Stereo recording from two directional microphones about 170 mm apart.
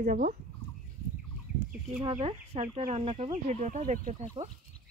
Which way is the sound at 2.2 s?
35° right (ahead or behind).